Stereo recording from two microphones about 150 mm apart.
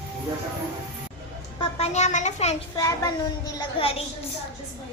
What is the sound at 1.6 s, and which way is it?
Speech, 45° left (ahead or behind).